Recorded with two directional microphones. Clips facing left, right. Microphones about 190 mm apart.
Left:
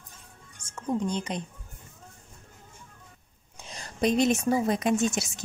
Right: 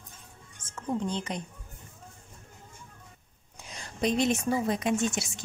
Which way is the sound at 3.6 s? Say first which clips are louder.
Left 2 dB; 35° left (ahead or behind).